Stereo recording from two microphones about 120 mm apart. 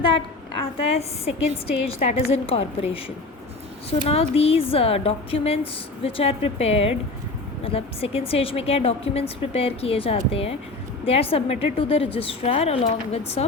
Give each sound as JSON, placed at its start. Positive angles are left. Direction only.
{"t": 0.6, "sound": "a woman's voice", "side_deg": 55}